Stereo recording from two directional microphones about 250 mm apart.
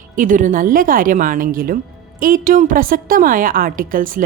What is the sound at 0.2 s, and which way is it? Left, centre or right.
Speech, right.